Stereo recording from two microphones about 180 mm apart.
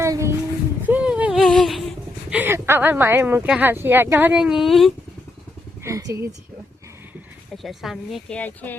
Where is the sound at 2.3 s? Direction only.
10° right (ahead or behind).